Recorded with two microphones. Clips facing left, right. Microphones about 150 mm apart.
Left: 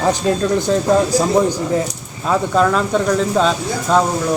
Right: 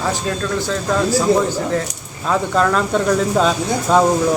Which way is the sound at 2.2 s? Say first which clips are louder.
Left 2 dB; 5° left (ahead or behind).